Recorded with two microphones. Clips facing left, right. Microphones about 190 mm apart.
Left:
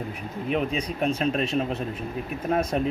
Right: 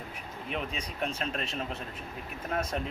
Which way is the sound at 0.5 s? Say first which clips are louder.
Left 10 dB; 15° left (ahead or behind).